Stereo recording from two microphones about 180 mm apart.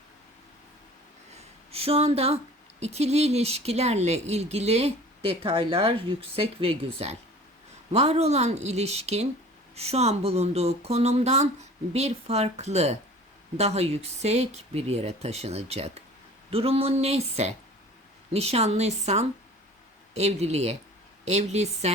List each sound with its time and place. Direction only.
1.7 s speech: 35° right (ahead or behind)